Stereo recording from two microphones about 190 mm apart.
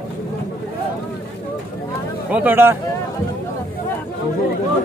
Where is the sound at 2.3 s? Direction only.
10° right (ahead or behind).